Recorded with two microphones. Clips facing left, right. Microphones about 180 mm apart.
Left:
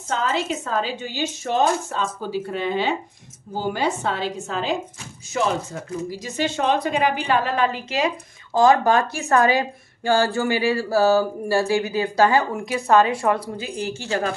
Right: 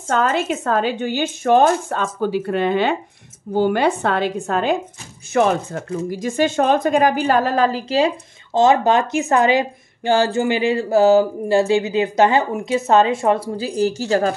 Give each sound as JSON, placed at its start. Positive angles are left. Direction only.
{"t": 0.1, "sound": "a woman's voice", "side_deg": -55}
{"t": 8.5, "sound": "speech", "side_deg": -20}